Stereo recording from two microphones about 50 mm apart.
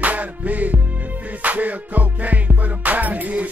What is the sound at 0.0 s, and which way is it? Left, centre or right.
Music, right.